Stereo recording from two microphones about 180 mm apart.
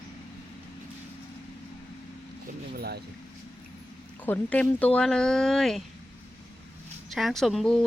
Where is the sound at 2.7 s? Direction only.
60° right (ahead or behind).